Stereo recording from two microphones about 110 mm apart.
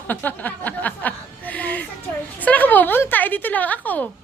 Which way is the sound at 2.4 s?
15° left (ahead or behind).